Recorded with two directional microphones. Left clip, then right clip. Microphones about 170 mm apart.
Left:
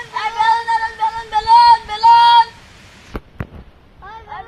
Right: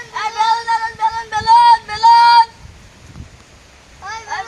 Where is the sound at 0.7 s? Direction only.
5° right (ahead or behind).